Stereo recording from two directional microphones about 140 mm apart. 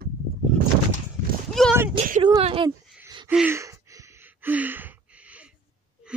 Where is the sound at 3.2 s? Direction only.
10° right (ahead or behind).